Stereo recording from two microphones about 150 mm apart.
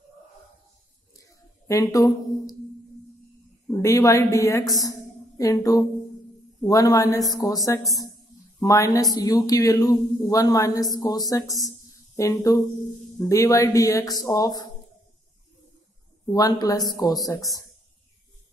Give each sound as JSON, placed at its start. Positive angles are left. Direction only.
{"t": 1.7, "sound": "a man's voice", "side_deg": 20}
{"t": 3.7, "sound": "a man's voice", "side_deg": 20}
{"t": 16.3, "sound": "a man's voice", "side_deg": 25}